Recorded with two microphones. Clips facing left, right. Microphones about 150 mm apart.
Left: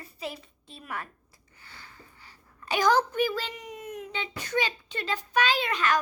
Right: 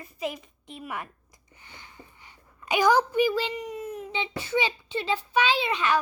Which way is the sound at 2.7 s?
10° right (ahead or behind).